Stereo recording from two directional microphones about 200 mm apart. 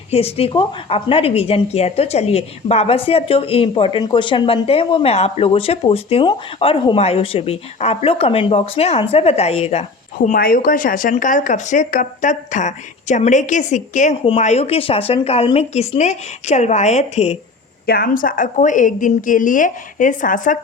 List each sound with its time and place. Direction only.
0.1 s a woman's voice: 30° left (ahead or behind)
10.2 s speech: 45° left (ahead or behind)
17.8 s speech: 50° left (ahead or behind)